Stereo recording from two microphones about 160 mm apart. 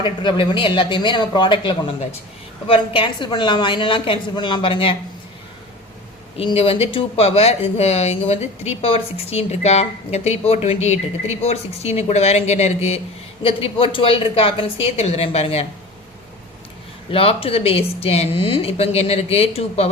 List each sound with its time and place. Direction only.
0.0 s speech: 30° left (ahead or behind)
6.3 s speech: 35° left (ahead or behind)
17.1 s speech: 35° left (ahead or behind)